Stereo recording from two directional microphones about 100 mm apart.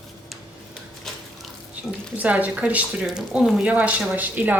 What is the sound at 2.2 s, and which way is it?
Speech, 15° right (ahead or behind).